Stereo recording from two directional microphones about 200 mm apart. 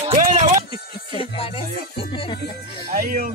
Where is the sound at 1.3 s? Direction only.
30° left (ahead or behind).